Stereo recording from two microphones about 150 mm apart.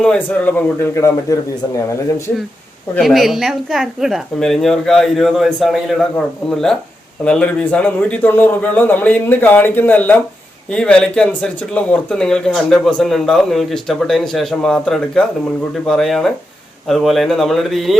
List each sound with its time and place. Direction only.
0.0 s a man's voice: 5° left (ahead or behind)
3.0 s a man's voice: centre (ahead or behind)